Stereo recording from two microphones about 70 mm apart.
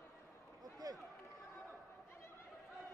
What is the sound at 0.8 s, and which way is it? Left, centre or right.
Speech, right.